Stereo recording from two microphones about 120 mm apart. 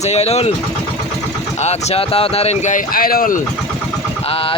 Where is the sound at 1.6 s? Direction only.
65° left (ahead or behind); by 2.8 s 85° left.